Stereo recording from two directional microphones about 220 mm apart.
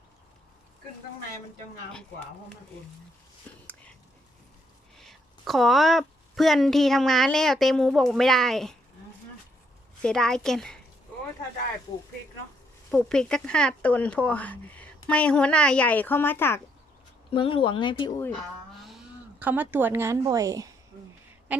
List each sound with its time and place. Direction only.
4.9 s a woman's voice: centre (ahead or behind)
10.0 s speech: 5° left (ahead or behind)
12.9 s speech: 5° left (ahead or behind)
17.3 s speech: 25° left (ahead or behind)
19.4 s speech: 10° right (ahead or behind)